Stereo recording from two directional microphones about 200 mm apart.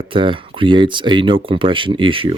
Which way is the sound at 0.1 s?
25° right (ahead or behind).